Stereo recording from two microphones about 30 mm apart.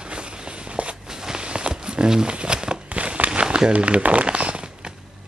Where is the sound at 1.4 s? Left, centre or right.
Right.